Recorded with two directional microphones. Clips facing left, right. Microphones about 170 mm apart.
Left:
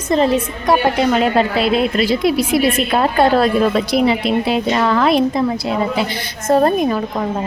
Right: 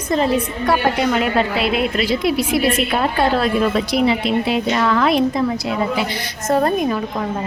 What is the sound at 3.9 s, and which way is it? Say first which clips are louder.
A woman's voice: left 2 dB; 40° left (ahead or behind).